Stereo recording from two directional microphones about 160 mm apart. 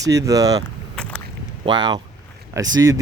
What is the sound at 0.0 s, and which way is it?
Speech, 20° right (ahead or behind).